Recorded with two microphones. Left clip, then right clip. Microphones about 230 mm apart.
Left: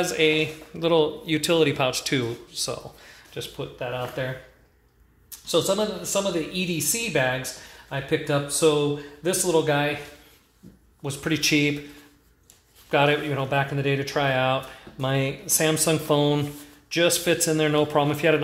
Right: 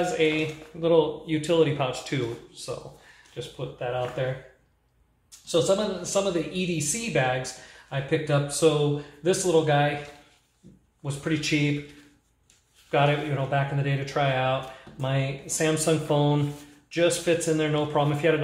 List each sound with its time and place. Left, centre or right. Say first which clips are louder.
0.2 s speech: left 3 dB; left
5.5 s speech: left 1 dB; left
11.0 s speech: left 3 dB; left
12.9 s speech: left 3 dB; left